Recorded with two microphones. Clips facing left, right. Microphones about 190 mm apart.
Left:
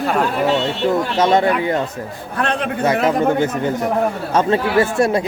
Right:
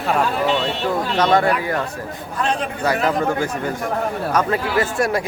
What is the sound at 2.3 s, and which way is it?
Speech, 65° left (ahead or behind).